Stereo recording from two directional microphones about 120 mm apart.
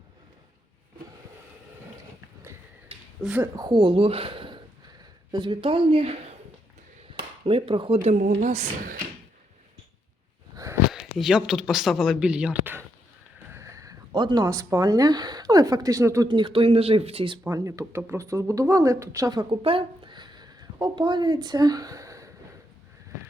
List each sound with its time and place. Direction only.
3.2 s speech: 10° right (ahead or behind)
3.5 s speech: 35° right (ahead or behind); by 6.1 s 50° right (ahead or behind)
7.1 s a sound: 50° right (ahead or behind)
8.0 s speech: 80° right
10.5 s a sound: 30° right (ahead or behind)
10.9 s speech: 5° right (ahead or behind)
13.5 s a sound: 25° right (ahead or behind)
14.1 s a woman's voice: 40° right (ahead or behind)
16.3 s speech: 45° right (ahead or behind)
17.4 s speech: 25° right (ahead or behind)
19.5 s speech: 50° right (ahead or behind); by 22.3 s 25° right (ahead or behind)